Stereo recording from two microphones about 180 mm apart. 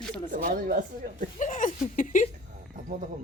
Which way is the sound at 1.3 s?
45° left (ahead or behind).